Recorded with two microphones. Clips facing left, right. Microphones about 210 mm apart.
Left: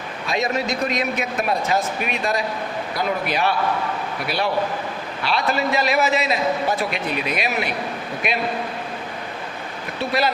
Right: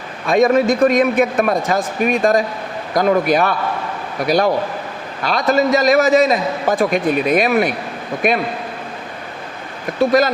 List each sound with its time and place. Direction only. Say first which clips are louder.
0.3 s a man's voice: right 10 dB; 50° right (ahead or behind)
10.0 s a man's voice: right 8 dB; 45° right (ahead or behind)